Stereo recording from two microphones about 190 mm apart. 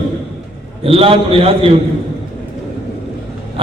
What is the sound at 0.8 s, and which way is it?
Speech, 30° right (ahead or behind).